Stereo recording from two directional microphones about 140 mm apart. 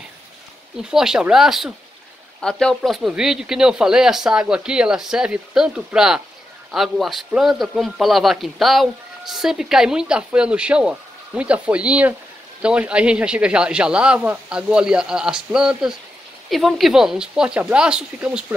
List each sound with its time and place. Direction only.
0.8 s a man's voice: 5° right (ahead or behind)